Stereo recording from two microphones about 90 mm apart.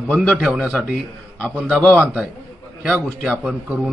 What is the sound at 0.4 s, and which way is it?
A man's voice, 10° right (ahead or behind).